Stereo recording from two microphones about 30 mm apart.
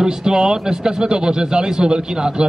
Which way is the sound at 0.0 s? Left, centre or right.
Right.